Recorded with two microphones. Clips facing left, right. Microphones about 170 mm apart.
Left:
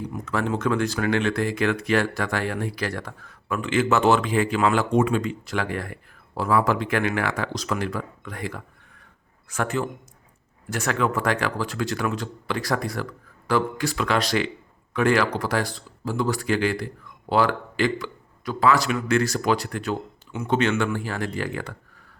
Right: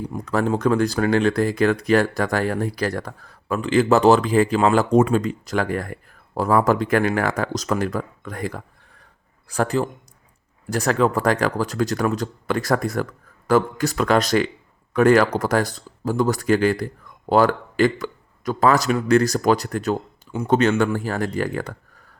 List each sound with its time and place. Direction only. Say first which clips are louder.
0.1 s speech: right 5 dB; 35° right (ahead or behind)